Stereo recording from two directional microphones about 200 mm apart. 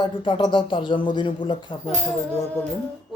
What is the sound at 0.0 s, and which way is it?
Speech, 25° left (ahead or behind).